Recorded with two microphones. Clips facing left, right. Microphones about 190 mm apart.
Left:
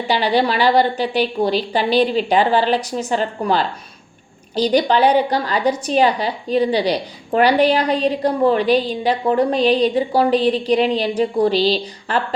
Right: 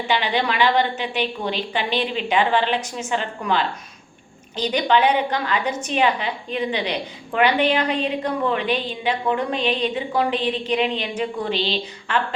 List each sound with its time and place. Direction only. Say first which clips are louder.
0.1 s a woman's voice: left 5 dB; 35° left (ahead or behind)